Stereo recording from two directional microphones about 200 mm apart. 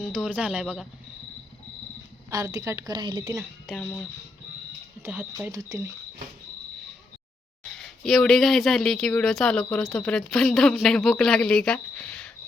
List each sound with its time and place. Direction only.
0.0 s speech: 5° right (ahead or behind)
2.3 s a woman's voice: 15° right (ahead or behind)
3.8 s speech: 5° left (ahead or behind)
5.0 s a woman's voice: 10° right (ahead or behind)
7.8 s speech: centre (ahead or behind)